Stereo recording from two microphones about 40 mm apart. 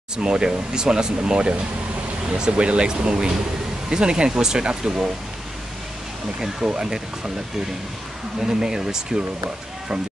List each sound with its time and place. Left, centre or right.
0.2 s speech: centre
6.6 s speech: right
8.4 s speech: centre